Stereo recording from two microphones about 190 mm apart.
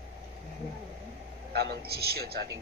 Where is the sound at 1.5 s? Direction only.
60° right (ahead or behind).